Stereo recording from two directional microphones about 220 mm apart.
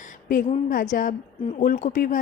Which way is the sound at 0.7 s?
35° left (ahead or behind).